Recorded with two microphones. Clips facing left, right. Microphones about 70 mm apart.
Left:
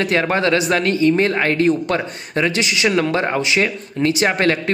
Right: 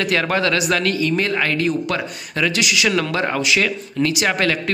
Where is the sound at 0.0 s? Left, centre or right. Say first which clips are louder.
Left 2 dB; left.